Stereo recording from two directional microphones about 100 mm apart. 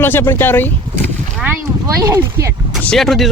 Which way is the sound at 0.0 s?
25° left (ahead or behind).